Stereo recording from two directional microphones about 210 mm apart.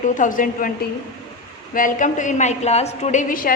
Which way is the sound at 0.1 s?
40° left (ahead or behind).